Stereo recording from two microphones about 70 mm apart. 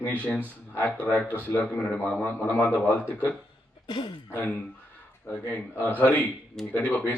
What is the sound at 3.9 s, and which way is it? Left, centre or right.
Speech, left.